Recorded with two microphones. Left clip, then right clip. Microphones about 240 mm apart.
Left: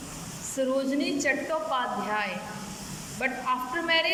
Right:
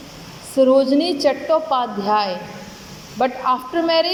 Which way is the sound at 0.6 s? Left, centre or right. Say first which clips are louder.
Right 13 dB; right.